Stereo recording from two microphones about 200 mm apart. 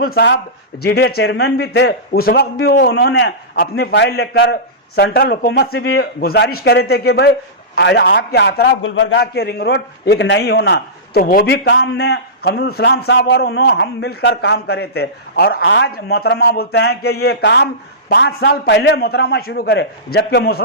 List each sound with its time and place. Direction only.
0.1 s a man's voice: 55° left (ahead or behind)
11.5 s a man's voice: 60° left (ahead or behind)